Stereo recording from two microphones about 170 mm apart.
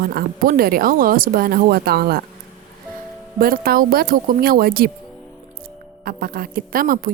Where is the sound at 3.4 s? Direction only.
60° right (ahead or behind).